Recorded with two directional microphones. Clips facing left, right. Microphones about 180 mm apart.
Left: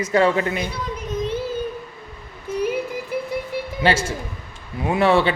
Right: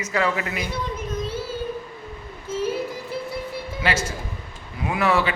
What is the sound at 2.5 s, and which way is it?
Music, 15° left (ahead or behind).